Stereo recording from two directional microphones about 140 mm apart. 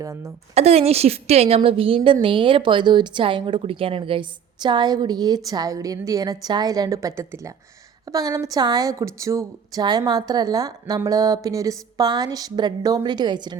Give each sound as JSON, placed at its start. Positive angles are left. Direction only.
{"t": 0.0, "sound": "a woman's voice", "side_deg": -25}
{"t": 0.5, "sound": "a woman's voice", "side_deg": -50}